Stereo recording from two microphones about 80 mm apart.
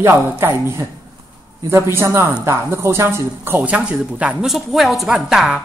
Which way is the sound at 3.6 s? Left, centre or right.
Centre.